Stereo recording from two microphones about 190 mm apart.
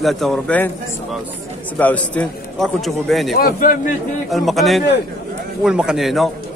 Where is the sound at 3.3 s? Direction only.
50° left (ahead or behind).